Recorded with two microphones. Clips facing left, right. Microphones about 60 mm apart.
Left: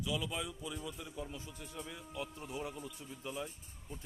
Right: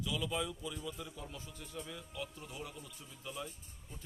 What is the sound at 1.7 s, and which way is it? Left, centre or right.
A man's voice, centre.